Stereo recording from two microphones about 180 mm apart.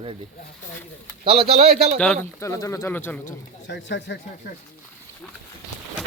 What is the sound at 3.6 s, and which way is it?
Speech, 80° left.